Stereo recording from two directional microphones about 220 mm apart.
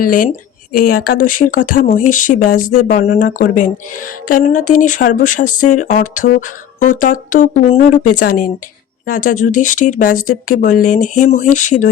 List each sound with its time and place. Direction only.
0.0 s speech: 40° left (ahead or behind)